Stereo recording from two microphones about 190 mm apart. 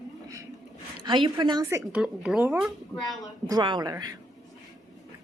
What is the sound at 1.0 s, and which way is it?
A woman's voice, 25° right (ahead or behind).